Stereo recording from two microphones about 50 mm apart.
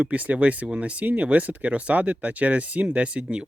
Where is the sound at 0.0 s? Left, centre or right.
Right.